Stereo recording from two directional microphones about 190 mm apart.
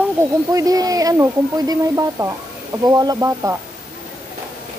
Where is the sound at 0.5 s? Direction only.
20° right (ahead or behind).